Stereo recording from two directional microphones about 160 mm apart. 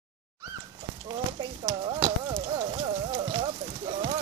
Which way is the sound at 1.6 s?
30° right (ahead or behind).